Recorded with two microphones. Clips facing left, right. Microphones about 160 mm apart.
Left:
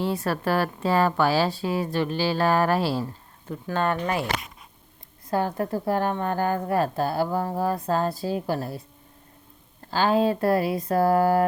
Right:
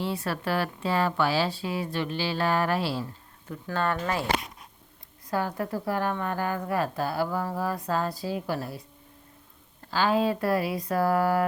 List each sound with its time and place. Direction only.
0.0 s a woman's voice: 45° left (ahead or behind)
3.5 s a woman's voice: 20° left (ahead or behind)
5.3 s a woman's voice: 30° left (ahead or behind)
9.9 s a woman's voice: 35° left (ahead or behind)